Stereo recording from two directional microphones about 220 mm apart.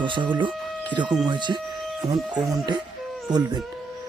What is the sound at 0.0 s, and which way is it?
Speech, 20° right (ahead or behind).